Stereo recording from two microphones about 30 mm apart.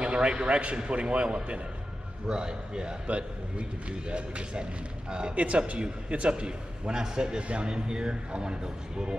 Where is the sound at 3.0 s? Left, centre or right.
Right.